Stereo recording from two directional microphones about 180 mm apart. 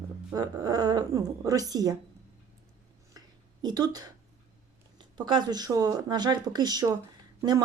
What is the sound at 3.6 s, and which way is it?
Speech, 20° right (ahead or behind).